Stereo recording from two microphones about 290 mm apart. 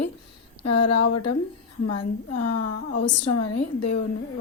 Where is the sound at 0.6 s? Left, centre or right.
Left.